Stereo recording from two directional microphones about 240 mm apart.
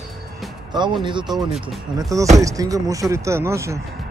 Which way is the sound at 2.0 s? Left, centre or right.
Centre.